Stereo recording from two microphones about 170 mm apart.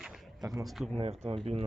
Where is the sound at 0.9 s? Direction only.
35° right (ahead or behind).